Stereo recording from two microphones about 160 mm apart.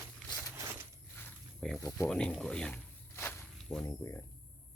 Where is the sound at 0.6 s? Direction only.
15° right (ahead or behind).